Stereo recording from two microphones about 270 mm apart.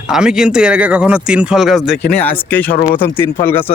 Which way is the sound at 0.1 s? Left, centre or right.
Centre.